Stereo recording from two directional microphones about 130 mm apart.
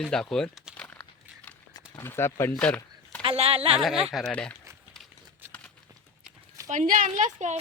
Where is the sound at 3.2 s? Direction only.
45° right (ahead or behind).